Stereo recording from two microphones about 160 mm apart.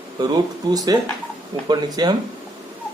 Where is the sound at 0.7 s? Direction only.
25° right (ahead or behind).